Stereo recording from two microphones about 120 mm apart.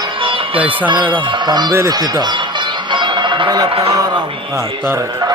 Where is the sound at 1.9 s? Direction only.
35° right (ahead or behind).